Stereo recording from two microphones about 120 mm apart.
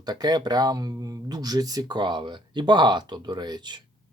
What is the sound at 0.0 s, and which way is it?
Speech, 35° right (ahead or behind).